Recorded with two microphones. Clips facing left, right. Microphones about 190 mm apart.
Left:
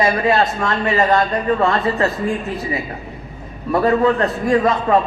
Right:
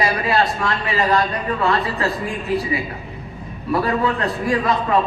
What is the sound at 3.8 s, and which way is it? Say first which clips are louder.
Speech: left 7 dB; 40° left (ahead or behind).